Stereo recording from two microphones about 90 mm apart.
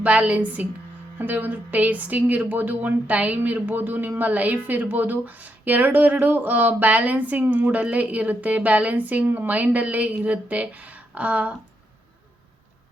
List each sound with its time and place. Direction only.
0.0 s speech: 15° right (ahead or behind)